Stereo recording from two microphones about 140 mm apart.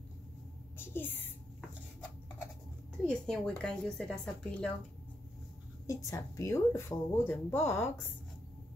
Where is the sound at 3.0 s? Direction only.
5° left (ahead or behind).